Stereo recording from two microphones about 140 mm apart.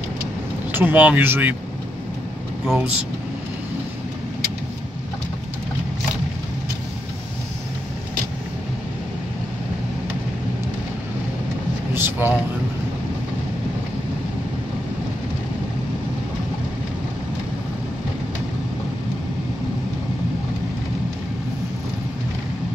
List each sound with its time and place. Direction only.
0.7 s speech: 15° right (ahead or behind)
2.6 s speech: 5° right (ahead or behind)
11.9 s a sound: 15° right (ahead or behind)